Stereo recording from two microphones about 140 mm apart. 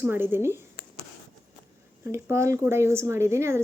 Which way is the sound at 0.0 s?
15° right (ahead or behind).